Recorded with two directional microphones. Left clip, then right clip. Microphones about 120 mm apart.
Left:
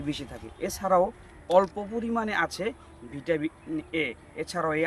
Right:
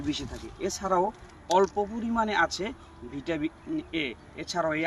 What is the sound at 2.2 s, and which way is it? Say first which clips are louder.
Speech: right 1 dB; 90° left.